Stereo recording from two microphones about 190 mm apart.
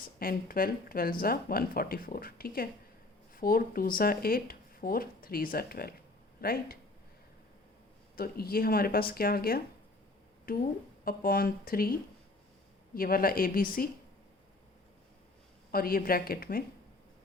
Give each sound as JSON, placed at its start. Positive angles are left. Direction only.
{"t": 0.2, "sound": "speech", "side_deg": 50}
{"t": 8.1, "sound": "speech", "side_deg": 55}
{"t": 15.7, "sound": "speech", "side_deg": 50}